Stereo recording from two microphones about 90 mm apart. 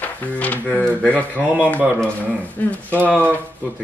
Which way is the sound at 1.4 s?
15° right (ahead or behind).